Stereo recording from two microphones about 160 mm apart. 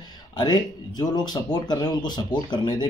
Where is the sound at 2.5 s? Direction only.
30° left (ahead or behind).